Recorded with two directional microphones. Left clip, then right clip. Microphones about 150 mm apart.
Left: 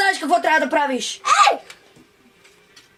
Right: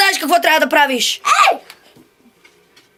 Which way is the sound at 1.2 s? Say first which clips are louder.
Right 2 dB; 75° right (ahead or behind).